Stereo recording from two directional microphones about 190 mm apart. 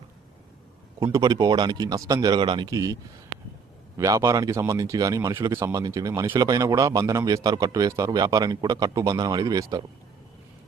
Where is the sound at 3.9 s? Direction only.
20° right (ahead or behind).